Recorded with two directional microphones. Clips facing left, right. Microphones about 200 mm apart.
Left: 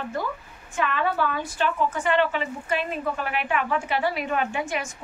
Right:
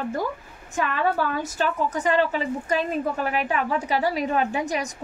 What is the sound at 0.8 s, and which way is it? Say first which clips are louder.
A woman's voice: right 1 dB; 40° right (ahead or behind).